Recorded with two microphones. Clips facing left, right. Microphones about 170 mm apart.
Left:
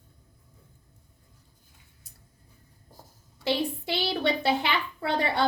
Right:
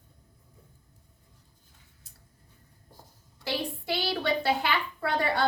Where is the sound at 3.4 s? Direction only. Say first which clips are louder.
Left 5 dB; 20° left (ahead or behind).